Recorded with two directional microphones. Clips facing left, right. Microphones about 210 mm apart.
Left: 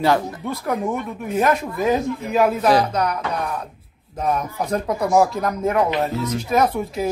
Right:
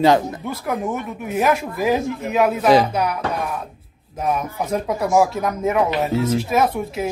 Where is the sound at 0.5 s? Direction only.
5° right (ahead or behind).